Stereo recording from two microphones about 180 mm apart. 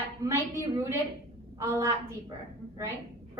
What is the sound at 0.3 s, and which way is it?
A woman's voice, 15° right (ahead or behind).